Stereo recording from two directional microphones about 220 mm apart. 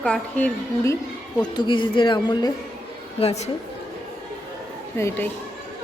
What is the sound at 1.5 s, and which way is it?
Speech, 20° left (ahead or behind).